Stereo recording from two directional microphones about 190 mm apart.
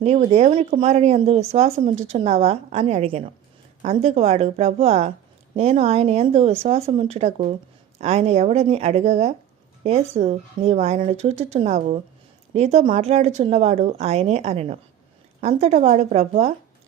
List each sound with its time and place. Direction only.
0.0 s a woman's voice: 35° right (ahead or behind)